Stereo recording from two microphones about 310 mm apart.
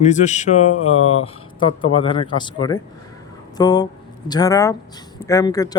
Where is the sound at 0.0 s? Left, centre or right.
Left.